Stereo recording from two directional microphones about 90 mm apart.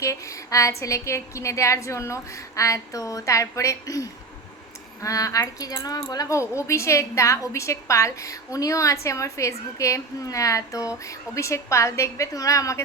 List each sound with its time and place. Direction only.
0.0 s speech: 35° left (ahead or behind)